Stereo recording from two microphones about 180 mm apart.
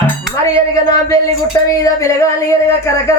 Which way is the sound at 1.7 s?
15° left (ahead or behind).